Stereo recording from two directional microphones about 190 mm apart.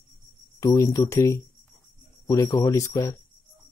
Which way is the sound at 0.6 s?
20° left (ahead or behind).